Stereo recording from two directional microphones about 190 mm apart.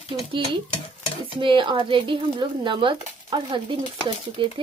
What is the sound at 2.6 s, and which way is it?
Stir, 25° right (ahead or behind).